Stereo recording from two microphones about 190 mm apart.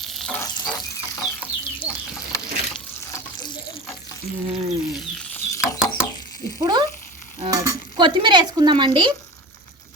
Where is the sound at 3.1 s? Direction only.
20° left (ahead or behind).